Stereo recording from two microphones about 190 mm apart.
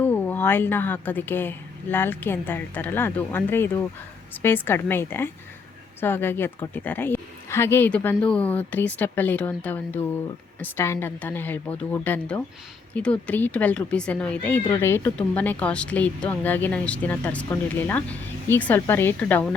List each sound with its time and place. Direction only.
0.0 s speech: 10° left (ahead or behind)